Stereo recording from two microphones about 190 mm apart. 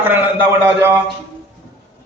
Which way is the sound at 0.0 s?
10° right (ahead or behind).